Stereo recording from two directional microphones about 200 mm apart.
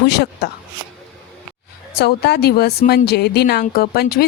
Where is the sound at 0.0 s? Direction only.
55° left (ahead or behind).